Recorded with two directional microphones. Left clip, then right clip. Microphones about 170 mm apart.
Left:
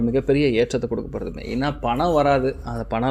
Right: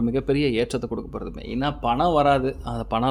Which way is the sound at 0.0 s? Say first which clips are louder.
Left 3 dB; 5° right (ahead or behind).